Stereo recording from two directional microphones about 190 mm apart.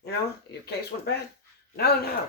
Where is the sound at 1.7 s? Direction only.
55° left (ahead or behind).